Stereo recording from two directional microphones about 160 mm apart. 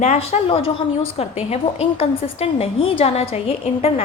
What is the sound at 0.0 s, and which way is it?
A woman's voice, 45° left (ahead or behind).